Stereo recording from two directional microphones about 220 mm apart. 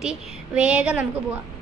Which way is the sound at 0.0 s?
5° right (ahead or behind).